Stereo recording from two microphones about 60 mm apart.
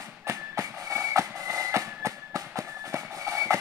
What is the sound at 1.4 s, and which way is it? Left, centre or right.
Fireworks, right.